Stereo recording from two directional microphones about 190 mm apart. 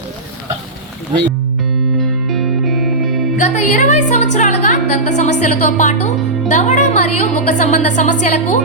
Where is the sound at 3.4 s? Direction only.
40° left (ahead or behind).